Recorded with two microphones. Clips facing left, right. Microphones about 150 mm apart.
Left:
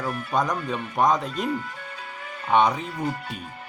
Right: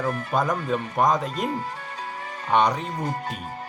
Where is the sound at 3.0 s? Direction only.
40° right (ahead or behind).